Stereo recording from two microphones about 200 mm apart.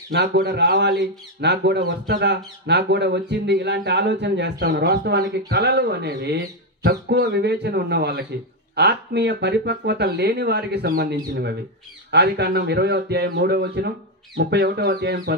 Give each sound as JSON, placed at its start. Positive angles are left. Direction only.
{"t": 0.1, "sound": "speech", "side_deg": -55}